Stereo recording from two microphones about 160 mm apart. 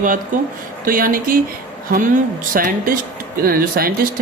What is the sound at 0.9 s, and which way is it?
Speech, 60° right (ahead or behind).